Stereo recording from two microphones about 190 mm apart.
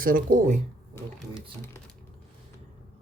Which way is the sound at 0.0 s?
45° right (ahead or behind).